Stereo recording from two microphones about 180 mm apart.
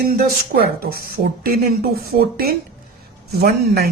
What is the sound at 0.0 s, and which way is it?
Speech, 55° right (ahead or behind).